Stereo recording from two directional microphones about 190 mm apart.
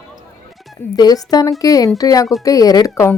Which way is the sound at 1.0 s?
20° left (ahead or behind).